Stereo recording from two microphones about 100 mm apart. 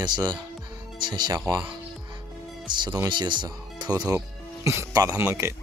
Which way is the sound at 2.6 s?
50° right (ahead or behind).